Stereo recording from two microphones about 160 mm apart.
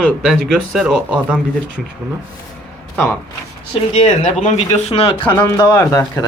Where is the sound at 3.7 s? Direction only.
45° left (ahead or behind).